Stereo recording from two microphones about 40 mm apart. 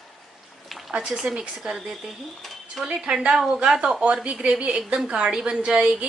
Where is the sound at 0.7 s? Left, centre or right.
Centre.